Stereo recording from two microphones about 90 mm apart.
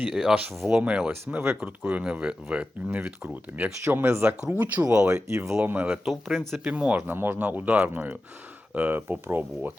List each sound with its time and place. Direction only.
0.1 s speech: 5° right (ahead or behind)
1.4 s speech: 25° right (ahead or behind)
1.8 s speech: 15° right (ahead or behind)
3.8 s speech: 30° right (ahead or behind)
5.0 s speech: 30° right (ahead or behind)
5.6 s speech: 20° right (ahead or behind)
6.1 s speech: centre (ahead or behind)
6.7 s speech: 10° right (ahead or behind)